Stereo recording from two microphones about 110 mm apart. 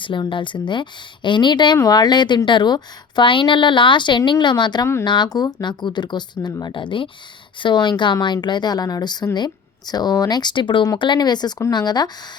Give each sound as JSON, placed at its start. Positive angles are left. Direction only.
{"t": 0.0, "sound": "a woman's voice", "side_deg": 50}